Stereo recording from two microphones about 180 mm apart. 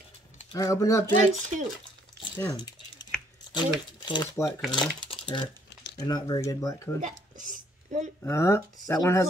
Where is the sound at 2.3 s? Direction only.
25° left (ahead or behind).